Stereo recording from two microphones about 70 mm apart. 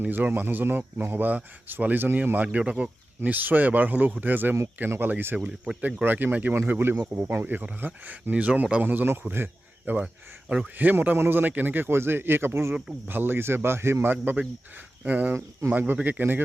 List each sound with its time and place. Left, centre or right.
0.0 s speech: right